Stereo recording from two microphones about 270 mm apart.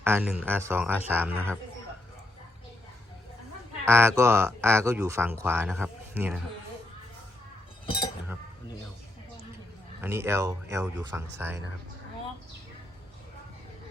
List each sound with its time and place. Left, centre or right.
0.0 s speech: centre
3.8 s speech: centre
7.9 s chink: centre
10.0 s speech: centre